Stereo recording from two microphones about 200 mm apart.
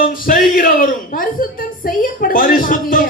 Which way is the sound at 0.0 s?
45° left (ahead or behind).